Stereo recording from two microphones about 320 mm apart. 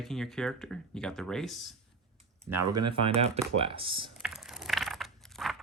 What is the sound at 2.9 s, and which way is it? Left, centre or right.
Speech, centre.